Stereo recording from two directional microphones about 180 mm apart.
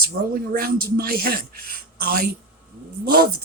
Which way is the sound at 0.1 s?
70° right (ahead or behind).